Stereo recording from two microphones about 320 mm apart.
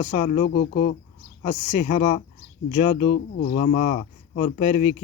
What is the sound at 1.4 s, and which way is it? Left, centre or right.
Speech, left.